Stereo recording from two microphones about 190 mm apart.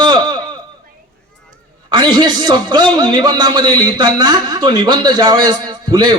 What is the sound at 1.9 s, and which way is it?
A man's voice, 25° right (ahead or behind).